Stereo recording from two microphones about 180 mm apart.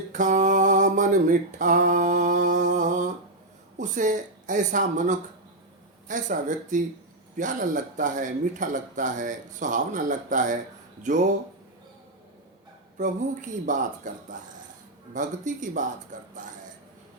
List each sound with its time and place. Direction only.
0.1 s speech: 45° right (ahead or behind)
13.0 s speech: 45° right (ahead or behind)